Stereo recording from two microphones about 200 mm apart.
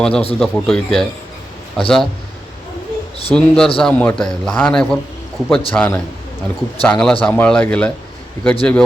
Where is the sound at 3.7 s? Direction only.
5° left (ahead or behind).